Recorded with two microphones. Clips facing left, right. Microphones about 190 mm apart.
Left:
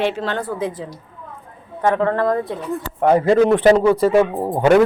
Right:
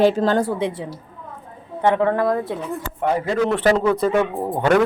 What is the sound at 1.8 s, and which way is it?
Speech, 15° right (ahead or behind).